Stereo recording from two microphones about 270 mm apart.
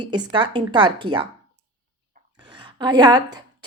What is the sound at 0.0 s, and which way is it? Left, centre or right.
A woman's voice, centre.